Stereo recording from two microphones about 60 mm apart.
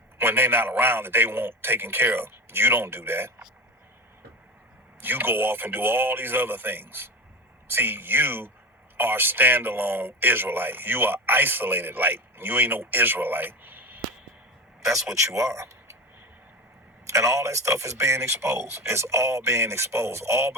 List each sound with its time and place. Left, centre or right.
0.2 s a man's voice: right
4.9 s a man's voice: right
15.4 s speech: right
17.1 s speech: right